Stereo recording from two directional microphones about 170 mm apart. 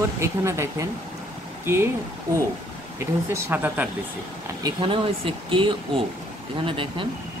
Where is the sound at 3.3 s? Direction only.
10° right (ahead or behind).